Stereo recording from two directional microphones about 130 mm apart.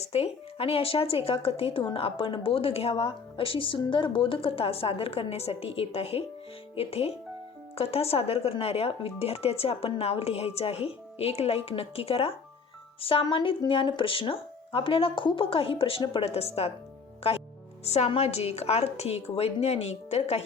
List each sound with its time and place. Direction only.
0.0 s a woman's voice: 50° left (ahead or behind)